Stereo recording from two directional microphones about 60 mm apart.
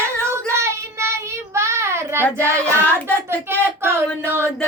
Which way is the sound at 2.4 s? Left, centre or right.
Right.